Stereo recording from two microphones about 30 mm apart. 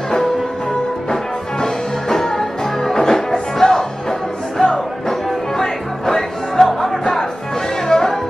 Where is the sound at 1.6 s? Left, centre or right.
Centre.